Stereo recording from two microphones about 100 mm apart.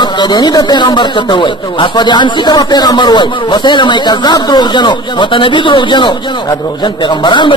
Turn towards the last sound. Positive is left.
turn(degrees=50)  # may be behind; listen again after turning